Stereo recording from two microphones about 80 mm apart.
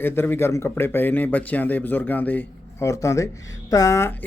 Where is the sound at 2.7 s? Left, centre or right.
Left.